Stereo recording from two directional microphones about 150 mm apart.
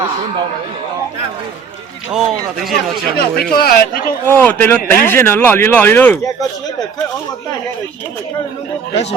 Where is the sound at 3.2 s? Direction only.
90° left.